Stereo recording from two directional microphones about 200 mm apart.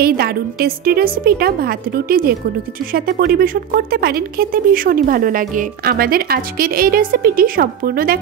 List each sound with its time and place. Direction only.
0.0 s speech: 50° right (ahead or behind)